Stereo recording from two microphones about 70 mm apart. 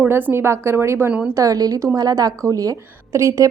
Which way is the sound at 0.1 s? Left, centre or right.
Right.